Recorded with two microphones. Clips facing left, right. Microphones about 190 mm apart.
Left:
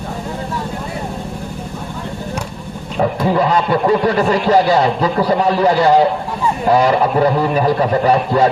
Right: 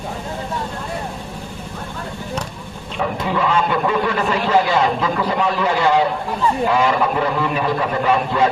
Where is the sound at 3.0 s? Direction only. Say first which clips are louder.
Left 6 dB; 40° left (ahead or behind).